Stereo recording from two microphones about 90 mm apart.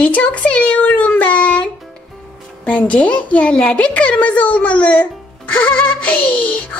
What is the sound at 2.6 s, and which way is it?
A child's voice, 15° left (ahead or behind).